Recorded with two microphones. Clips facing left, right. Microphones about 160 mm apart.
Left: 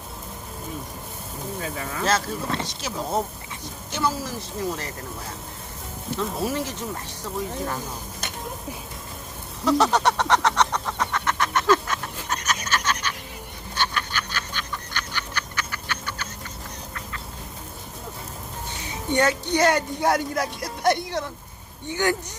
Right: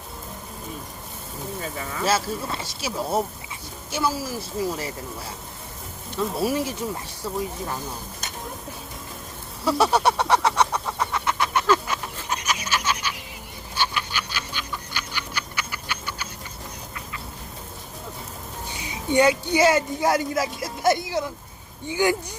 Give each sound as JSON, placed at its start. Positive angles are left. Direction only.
{"t": 1.6, "sound": "speech", "side_deg": 0}
{"t": 6.1, "sound": "speech", "side_deg": -10}
{"t": 9.6, "sound": "a sound", "side_deg": -10}
{"t": 13.7, "sound": "frog", "side_deg": -10}
{"t": 18.8, "sound": "speech", "side_deg": -10}